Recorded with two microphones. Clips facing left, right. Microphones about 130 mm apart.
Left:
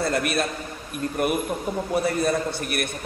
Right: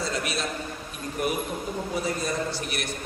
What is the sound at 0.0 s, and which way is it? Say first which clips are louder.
A man's voice: left 6 dB; 55° left (ahead or behind).